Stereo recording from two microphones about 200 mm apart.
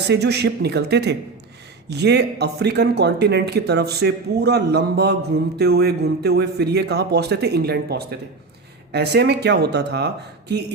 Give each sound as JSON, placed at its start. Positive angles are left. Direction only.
{"t": 0.1, "sound": "a man's voice", "side_deg": -55}